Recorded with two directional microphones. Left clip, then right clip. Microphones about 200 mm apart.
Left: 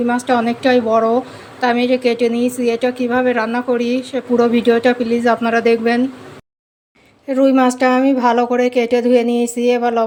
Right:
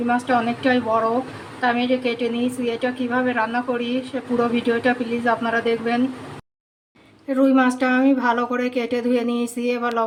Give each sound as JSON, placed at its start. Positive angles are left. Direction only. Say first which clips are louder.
{"t": 0.1, "sound": "a woman's voice", "louder": "even", "side_deg": 30}
{"t": 7.3, "sound": "a woman's voice", "louder": "left 5 dB", "side_deg": 35}